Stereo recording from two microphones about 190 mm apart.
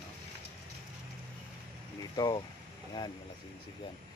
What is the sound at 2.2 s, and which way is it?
Speech, 20° left (ahead or behind).